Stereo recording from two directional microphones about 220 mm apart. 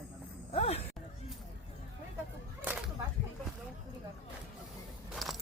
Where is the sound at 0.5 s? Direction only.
25° left (ahead or behind).